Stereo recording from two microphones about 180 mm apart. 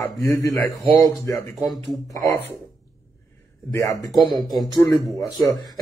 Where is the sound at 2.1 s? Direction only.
20° left (ahead or behind).